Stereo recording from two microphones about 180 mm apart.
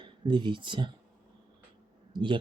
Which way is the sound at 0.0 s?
25° right (ahead or behind).